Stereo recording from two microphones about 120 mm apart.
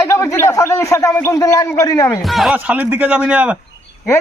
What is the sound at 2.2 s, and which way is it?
Speech, centre (ahead or behind).